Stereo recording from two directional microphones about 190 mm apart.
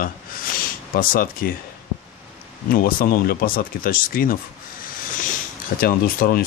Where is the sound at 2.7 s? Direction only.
50° left (ahead or behind).